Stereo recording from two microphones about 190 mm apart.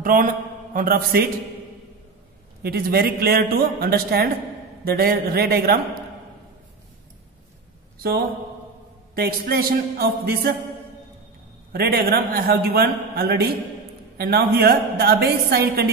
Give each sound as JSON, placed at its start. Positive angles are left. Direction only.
{"t": 0.0, "sound": "a man's voice", "side_deg": -45}
{"t": 2.6, "sound": "a man's voice", "side_deg": -55}
{"t": 9.1, "sound": "a man's voice", "side_deg": -50}
{"t": 11.7, "sound": "a man's voice", "side_deg": -55}